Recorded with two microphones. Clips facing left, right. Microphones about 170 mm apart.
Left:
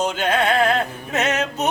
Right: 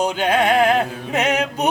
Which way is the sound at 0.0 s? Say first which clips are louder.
Right 2 dB; 15° right (ahead or behind).